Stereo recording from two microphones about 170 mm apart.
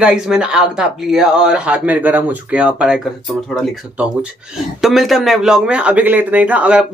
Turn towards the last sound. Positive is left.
turn(degrees=-10)  # may be behind; listen again after turning